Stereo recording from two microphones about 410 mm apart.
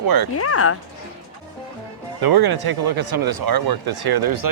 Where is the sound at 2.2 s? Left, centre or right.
Right.